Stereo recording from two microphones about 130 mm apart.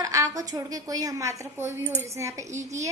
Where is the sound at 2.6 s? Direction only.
65° right (ahead or behind).